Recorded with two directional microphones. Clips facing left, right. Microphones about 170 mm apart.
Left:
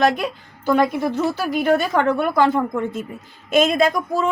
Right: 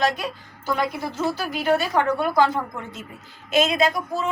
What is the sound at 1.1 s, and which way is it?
Speech, 55° left (ahead or behind).